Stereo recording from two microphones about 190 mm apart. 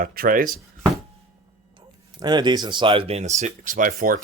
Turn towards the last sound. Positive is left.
turn(degrees=-45)  # may be behind; listen again after turning